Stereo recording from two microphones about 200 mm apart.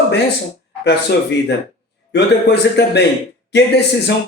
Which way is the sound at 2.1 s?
55° left (ahead or behind).